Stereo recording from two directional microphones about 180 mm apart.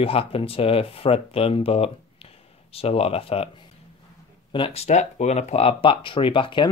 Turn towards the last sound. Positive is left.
turn(degrees=30)  # may be behind; listen again after turning